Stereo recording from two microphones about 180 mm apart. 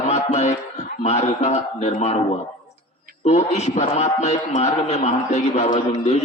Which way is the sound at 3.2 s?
35° left (ahead or behind).